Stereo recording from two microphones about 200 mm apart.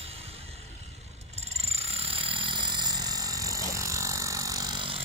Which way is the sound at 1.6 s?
30° right (ahead or behind).